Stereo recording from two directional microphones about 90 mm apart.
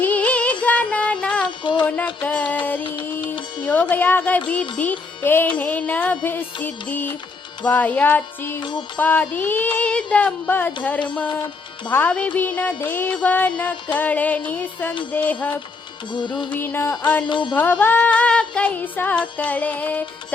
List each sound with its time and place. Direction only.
0.0 s music: 15° left (ahead or behind)
1.6 s music: 60° left (ahead or behind)
2.2 s music: 15° left (ahead or behind)
2.8 s music: 65° left (ahead or behind)
3.6 s music: 20° left (ahead or behind)
9.3 s a sound: 20° left (ahead or behind)
11.9 s a sound: 20° left (ahead or behind)
12.1 s music: 15° left (ahead or behind)
15.1 s a sound: 15° left (ahead or behind)
16.1 s music: 60° left (ahead or behind)
16.5 s a sound: 20° left (ahead or behind)
17.2 s music: 60° left (ahead or behind)
17.6 s music: 20° left (ahead or behind)